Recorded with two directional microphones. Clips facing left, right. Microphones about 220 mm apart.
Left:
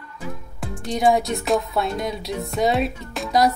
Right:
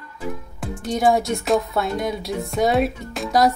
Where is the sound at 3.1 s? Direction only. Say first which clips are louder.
Even; centre (ahead or behind).